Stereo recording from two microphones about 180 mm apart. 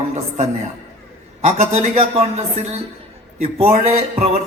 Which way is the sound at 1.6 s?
35° right (ahead or behind).